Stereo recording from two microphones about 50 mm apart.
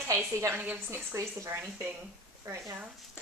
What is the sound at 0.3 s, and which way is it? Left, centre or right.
A woman's voice, right.